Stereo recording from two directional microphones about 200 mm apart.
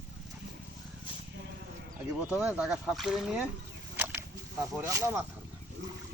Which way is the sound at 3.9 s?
10° right (ahead or behind).